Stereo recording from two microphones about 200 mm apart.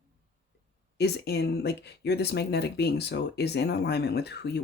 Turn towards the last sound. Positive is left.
turn(degrees=55)  # may be behind; listen again after turning